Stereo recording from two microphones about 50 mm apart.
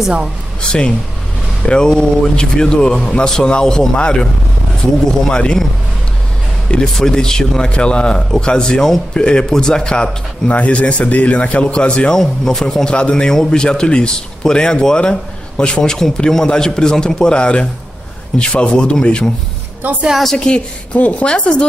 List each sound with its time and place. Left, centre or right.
0.6 s a man's voice: centre
5.3 s a man's voice: centre
7.0 s a man's voice: centre
8.8 s speech: centre
9.2 s a man's voice: centre
10.5 s a man's voice: left
12.2 s a man's voice: centre
20.3 s a man's voice: centre